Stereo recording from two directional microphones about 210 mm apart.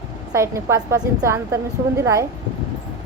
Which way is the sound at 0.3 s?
15° right (ahead or behind).